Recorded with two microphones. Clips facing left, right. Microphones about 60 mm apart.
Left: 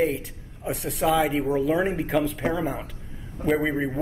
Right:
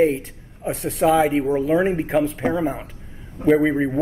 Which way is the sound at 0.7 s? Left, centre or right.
Right.